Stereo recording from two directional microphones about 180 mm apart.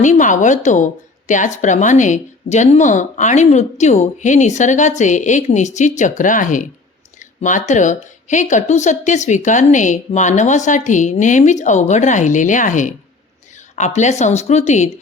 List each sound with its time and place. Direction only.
0.0 s speech: 45° left (ahead or behind)